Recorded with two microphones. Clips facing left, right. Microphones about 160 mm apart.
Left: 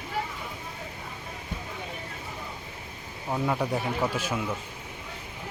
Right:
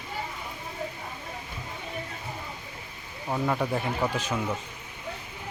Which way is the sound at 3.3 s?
5° left (ahead or behind).